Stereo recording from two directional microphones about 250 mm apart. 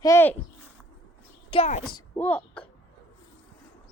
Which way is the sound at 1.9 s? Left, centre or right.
Centre.